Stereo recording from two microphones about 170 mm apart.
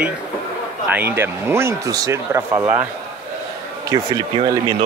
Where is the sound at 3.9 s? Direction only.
25° right (ahead or behind).